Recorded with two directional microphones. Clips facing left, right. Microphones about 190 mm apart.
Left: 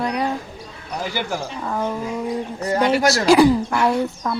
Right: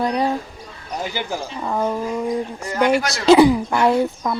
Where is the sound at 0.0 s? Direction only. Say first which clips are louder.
Right 2 dB; 30° right (ahead or behind).